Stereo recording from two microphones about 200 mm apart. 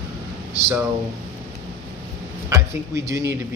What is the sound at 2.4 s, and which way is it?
Speech, 15° right (ahead or behind).